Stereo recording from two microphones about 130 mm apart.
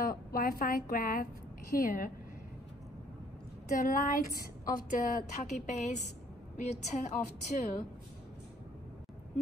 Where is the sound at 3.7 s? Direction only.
90° left; by 7.8 s 65° left (ahead or behind).